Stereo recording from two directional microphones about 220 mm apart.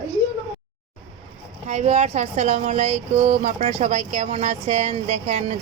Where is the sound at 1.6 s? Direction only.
30° right (ahead or behind).